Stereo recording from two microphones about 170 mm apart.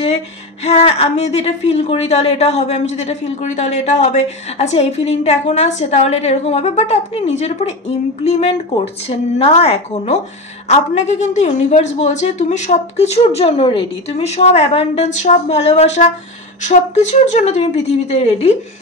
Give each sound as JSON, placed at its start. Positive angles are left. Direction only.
{"t": 0.7, "sound": "a woman's voice", "side_deg": 35}